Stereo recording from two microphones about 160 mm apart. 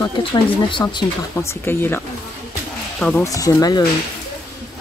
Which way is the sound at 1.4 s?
15° left (ahead or behind).